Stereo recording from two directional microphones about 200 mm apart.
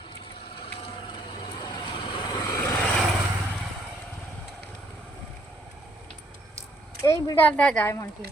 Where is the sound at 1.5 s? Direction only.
25° left (ahead or behind).